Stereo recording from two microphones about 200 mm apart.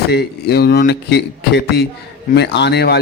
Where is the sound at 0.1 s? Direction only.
55° left (ahead or behind).